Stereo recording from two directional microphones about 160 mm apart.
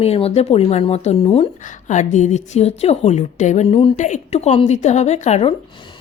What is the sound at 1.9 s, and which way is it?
A woman's voice, 50° left (ahead or behind).